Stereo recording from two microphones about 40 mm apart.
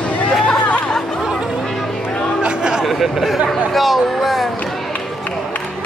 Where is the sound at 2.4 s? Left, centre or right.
Centre.